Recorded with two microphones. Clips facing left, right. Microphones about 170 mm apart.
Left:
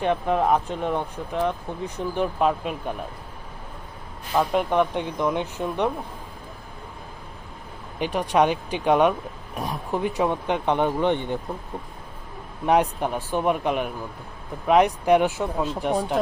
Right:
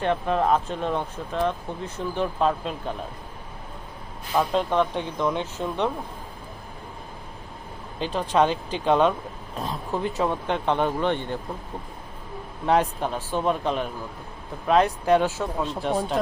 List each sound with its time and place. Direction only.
0.0 s speech: 15° left (ahead or behind)
4.5 s speech: 15° left (ahead or behind)
7.9 s speech: 15° left (ahead or behind)
12.6 s speech: 15° left (ahead or behind)